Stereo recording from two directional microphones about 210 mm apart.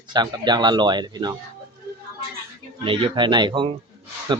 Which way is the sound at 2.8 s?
25° right (ahead or behind).